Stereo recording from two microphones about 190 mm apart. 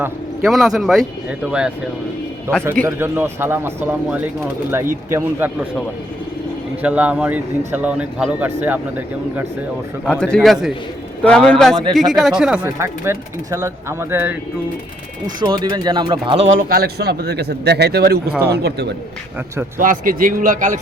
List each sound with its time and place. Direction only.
0.0 s a man's voice: centre (ahead or behind)
2.8 s speech: 10° right (ahead or behind)
6.8 s speech: 5° right (ahead or behind)
10.1 s a man's voice: 5° left (ahead or behind)
12.6 s speech: 15° right (ahead or behind)
15.4 s speech: 25° right (ahead or behind)
16.6 s a man's voice: 50° right (ahead or behind)
19.8 s a man's voice: 45° right (ahead or behind)